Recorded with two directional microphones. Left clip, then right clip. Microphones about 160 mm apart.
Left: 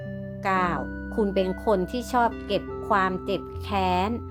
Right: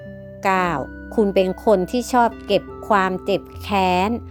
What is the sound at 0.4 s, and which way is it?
Speech, 40° right (ahead or behind).